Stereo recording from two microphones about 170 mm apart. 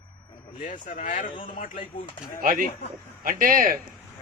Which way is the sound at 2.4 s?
55° right (ahead or behind).